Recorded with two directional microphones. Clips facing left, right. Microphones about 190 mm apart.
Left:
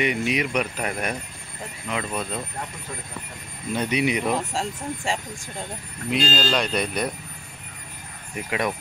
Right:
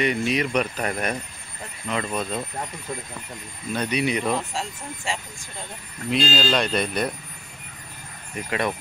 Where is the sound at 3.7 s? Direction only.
20° left (ahead or behind).